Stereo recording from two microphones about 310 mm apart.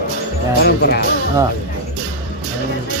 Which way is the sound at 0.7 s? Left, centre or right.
Left.